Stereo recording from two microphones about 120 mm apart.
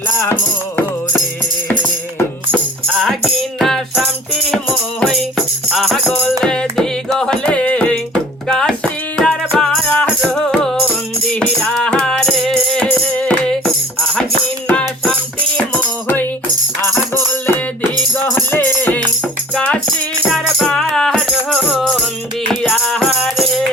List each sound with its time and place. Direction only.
1.8 s music: 15° left (ahead or behind)
2.8 s music: 5° left (ahead or behind)
14.7 s music: 10° left (ahead or behind)
18.3 s music: 15° left (ahead or behind)